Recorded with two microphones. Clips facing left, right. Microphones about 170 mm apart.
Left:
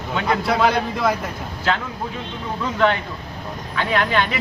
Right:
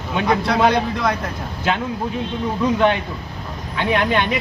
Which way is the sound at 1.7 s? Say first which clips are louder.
Right 1 dB; 15° right (ahead or behind).